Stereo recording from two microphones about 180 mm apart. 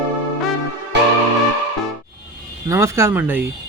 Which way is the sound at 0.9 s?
75° right (ahead or behind).